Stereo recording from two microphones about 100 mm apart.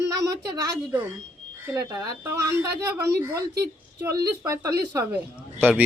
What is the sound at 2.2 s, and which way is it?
A woman's voice, 30° right (ahead or behind).